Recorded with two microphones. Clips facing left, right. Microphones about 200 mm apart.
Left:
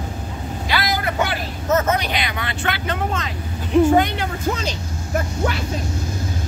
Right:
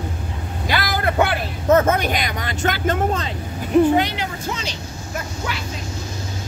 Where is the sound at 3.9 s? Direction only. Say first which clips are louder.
Left 2 dB; 50° left (ahead or behind).